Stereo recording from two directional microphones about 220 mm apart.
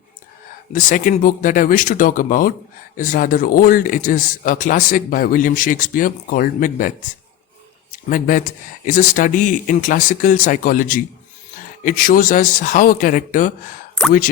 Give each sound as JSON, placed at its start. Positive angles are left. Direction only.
{"t": 0.7, "sound": "speech", "side_deg": 35}
{"t": 8.1, "sound": "speech", "side_deg": 40}